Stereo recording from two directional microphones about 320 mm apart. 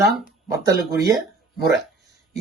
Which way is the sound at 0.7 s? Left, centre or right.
Right.